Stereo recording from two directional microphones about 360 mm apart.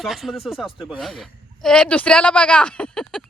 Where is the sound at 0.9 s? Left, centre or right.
Centre.